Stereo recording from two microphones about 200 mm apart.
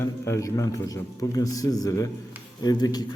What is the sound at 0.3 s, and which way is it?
A man's voice, 15° left (ahead or behind).